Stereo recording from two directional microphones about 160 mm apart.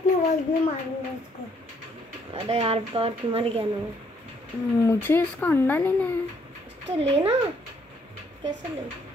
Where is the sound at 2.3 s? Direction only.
35° right (ahead or behind).